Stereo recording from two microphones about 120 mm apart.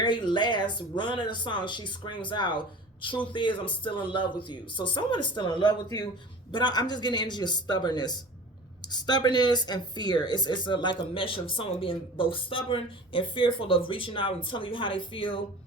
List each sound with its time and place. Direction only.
0.0 s speech: 40° left (ahead or behind)